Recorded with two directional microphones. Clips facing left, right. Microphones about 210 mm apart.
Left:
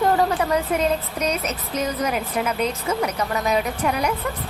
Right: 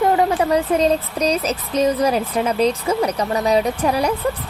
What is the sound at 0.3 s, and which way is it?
A woman's voice, 35° right (ahead or behind).